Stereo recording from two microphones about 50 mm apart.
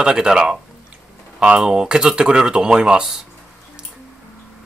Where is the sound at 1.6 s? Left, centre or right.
Centre.